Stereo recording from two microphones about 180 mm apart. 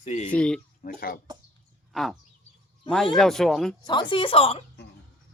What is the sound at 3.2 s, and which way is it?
Speech, centre (ahead or behind).